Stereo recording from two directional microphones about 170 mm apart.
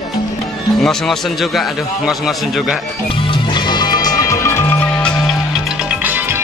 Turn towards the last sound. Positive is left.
turn(degrees=-10)  # may be behind; listen again after turning